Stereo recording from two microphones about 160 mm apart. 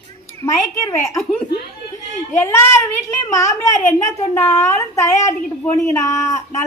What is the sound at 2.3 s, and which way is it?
A child's voice, 15° left (ahead or behind).